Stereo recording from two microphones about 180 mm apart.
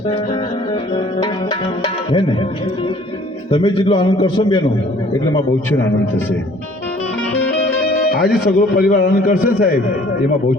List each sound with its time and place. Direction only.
3.5 s a man's voice: 30° left (ahead or behind)
7.9 s music: 60° left (ahead or behind)
8.4 s a man's voice: 55° left (ahead or behind)